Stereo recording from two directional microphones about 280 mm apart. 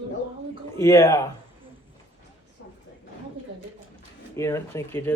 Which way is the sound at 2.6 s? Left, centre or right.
Left.